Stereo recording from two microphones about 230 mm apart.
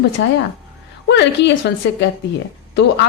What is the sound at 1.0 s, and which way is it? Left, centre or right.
A woman's voice, left.